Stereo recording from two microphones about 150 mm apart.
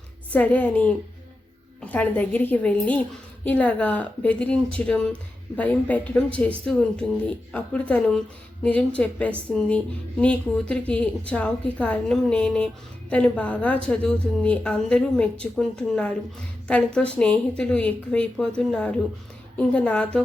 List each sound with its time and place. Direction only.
0.3 s speech: 10° left (ahead or behind)